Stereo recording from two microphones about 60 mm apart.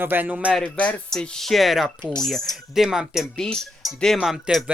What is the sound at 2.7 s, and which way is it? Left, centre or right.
Speech, centre.